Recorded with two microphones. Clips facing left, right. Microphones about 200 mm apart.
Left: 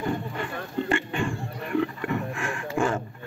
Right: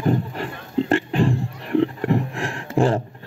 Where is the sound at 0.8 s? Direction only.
35° right (ahead or behind).